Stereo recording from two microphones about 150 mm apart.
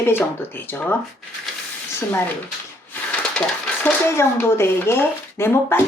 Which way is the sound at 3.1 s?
10° left (ahead or behind).